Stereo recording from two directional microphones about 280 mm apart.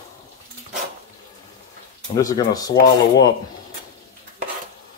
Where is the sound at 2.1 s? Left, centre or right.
Centre.